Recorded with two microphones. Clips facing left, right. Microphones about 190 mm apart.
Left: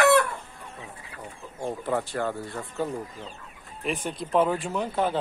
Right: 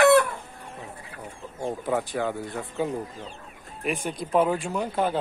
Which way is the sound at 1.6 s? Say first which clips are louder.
Right 1 dB; 5° right (ahead or behind).